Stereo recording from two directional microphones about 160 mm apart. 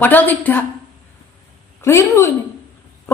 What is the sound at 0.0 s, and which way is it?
Speech, 10° left (ahead or behind).